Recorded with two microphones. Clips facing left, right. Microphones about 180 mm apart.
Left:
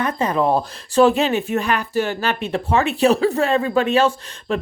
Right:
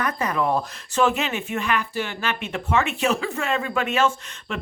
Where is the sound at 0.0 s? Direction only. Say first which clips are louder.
Left 5 dB; 30° left (ahead or behind).